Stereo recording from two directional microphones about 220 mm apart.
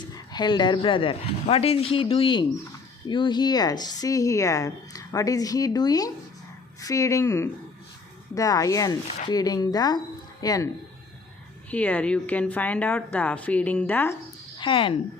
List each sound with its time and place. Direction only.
0.1 s speech: 20° left (ahead or behind)
11.7 s speech: 5° left (ahead or behind)
14.6 s speech: 25° left (ahead or behind)